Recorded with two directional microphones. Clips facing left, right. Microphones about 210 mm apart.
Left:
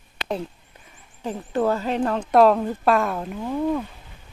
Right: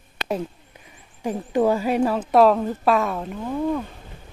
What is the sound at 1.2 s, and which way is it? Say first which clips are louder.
Speech: right 3 dB; 10° right (ahead or behind).